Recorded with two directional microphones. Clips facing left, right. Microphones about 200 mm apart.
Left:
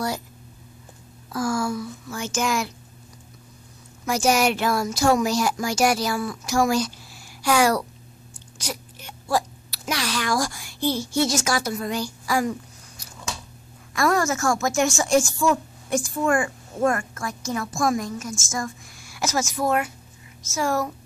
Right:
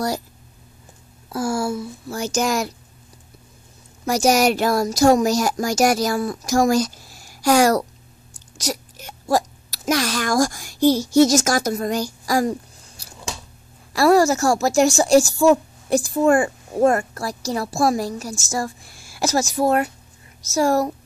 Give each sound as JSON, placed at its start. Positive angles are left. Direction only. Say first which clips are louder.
{"t": 1.3, "sound": "a woman's voice", "louder": "right 2 dB", "side_deg": -30}
{"t": 4.0, "sound": "a woman's voice", "louder": "right 4 dB", "side_deg": -40}